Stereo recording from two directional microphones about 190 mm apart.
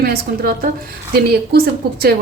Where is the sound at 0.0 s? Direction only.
50° right (ahead or behind).